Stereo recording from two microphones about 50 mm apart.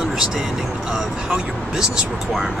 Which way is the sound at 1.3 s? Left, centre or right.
Centre.